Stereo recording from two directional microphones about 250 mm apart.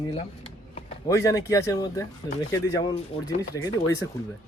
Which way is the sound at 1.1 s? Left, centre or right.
Centre.